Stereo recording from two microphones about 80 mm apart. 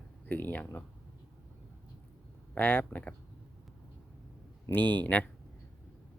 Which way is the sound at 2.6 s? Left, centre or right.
Left.